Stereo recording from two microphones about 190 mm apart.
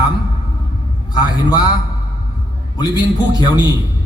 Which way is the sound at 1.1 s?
20° left (ahead or behind).